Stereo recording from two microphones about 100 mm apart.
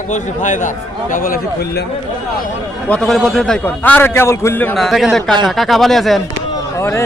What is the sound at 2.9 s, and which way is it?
Speech, 5° left (ahead or behind).